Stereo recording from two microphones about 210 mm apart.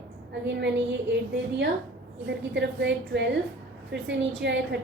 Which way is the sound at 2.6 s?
55° right (ahead or behind).